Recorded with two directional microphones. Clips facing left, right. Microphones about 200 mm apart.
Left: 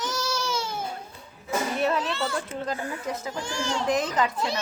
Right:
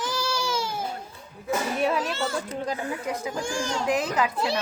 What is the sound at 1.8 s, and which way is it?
A child's voice, 10° right (ahead or behind).